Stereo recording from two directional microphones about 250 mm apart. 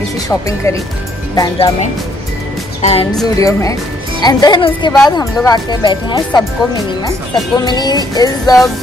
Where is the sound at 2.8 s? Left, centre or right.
Left.